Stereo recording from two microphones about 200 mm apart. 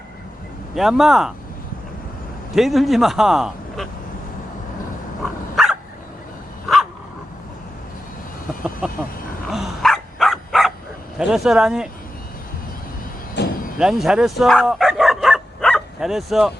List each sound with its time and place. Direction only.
0.8 s a man's voice: centre (ahead or behind)
2.6 s a man's voice: centre (ahead or behind)
8.8 s a man's voice: 5° right (ahead or behind)
9.5 s dog: centre (ahead or behind)
11.2 s a man's voice: 5° right (ahead or behind)
13.3 s vehicle: 55° left (ahead or behind)
13.7 s bow-wow: centre (ahead or behind)